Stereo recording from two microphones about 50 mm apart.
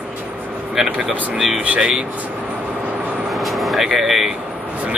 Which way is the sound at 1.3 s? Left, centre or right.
Centre.